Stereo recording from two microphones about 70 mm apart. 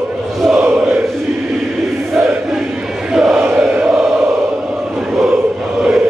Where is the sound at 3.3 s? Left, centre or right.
Right.